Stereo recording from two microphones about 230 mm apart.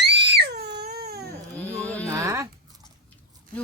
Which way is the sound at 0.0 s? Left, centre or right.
Right.